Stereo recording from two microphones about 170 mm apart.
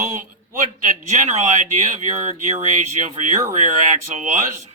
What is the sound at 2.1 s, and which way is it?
Speech, 45° right (ahead or behind).